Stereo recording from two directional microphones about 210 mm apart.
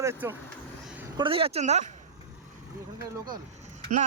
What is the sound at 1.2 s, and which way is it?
Speech, 25° right (ahead or behind).